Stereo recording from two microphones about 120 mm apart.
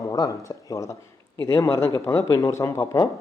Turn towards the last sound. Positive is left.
turn(degrees=30)  # may be behind; listen again after turning